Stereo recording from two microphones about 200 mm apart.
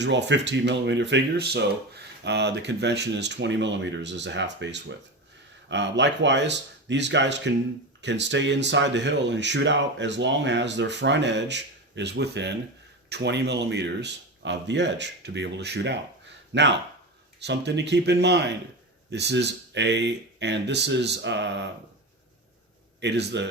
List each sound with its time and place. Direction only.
0.0 s speech: 60° right (ahead or behind)
23.0 s speech: 60° right (ahead or behind)